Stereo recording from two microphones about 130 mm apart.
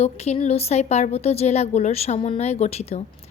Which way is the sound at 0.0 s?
55° left (ahead or behind).